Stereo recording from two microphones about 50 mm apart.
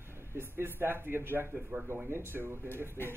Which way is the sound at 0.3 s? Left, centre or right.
Right.